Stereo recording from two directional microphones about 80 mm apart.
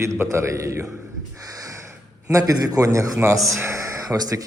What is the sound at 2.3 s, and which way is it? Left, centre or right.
A man's voice, right.